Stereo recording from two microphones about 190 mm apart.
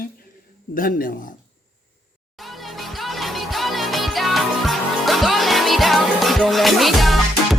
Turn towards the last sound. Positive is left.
turn(degrees=0)  # may be behind; listen again after turning